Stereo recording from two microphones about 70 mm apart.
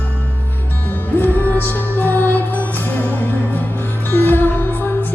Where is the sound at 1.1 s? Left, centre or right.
Left.